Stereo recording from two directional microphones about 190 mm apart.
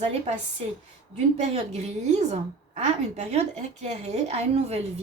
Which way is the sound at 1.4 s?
35° right (ahead or behind).